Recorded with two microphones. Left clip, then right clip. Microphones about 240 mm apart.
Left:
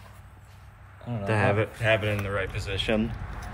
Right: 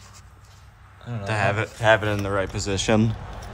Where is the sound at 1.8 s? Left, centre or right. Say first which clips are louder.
Right 7 dB; right.